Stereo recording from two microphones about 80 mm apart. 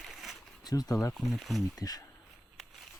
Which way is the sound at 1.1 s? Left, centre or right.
Centre.